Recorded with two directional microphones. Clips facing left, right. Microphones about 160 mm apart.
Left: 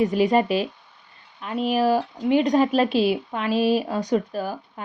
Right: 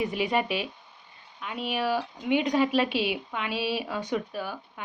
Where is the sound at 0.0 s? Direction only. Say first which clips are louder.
Left 8 dB; 40° left (ahead or behind).